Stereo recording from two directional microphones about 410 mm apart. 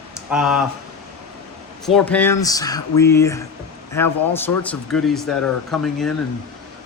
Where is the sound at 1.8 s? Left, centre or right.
Centre.